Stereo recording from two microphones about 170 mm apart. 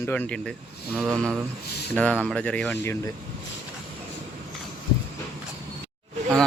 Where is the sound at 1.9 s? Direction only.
10° left (ahead or behind).